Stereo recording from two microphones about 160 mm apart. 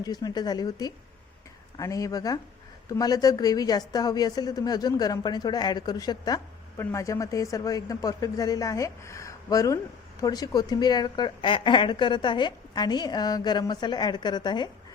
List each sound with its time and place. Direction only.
0.0 s a woman's voice: 25° left (ahead or behind)